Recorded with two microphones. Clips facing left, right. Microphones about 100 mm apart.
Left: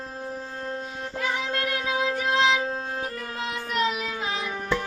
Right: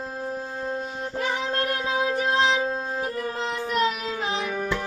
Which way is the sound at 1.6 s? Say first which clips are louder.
Right 2 dB; 35° right (ahead or behind).